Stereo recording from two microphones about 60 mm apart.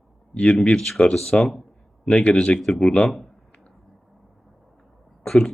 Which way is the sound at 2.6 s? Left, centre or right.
Centre.